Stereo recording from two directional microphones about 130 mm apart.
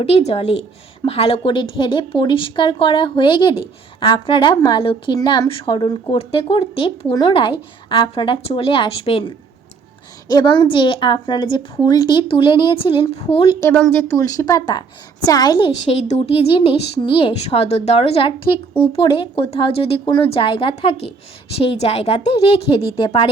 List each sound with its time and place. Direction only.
0.0 s speech: 55° left (ahead or behind)
13.6 s speech: 15° left (ahead or behind); by 15.7 s 35° left (ahead or behind)
15.9 s speech: 55° left (ahead or behind); by 23.3 s 40° left (ahead or behind)